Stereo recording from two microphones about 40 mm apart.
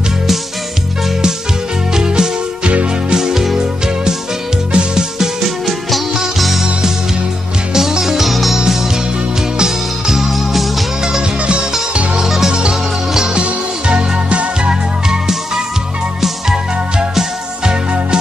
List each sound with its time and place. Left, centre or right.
2.0 s music: centre
5.7 s music: centre
7.7 s music: centre
9.6 s music: centre
11.1 s music: right
12.3 s music: centre
13.1 s music: centre
15.0 s music: centre
17.1 s music: centre